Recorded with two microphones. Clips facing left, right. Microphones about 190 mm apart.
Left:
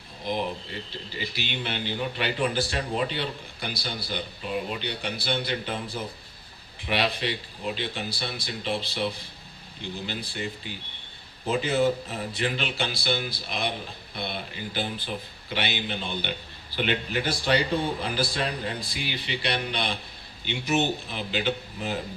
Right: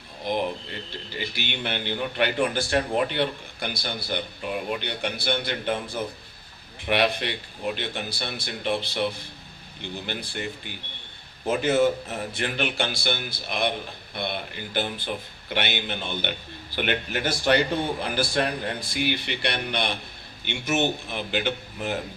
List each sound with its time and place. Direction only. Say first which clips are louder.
0.3 s speech: right 3 dB; 60° right (ahead or behind)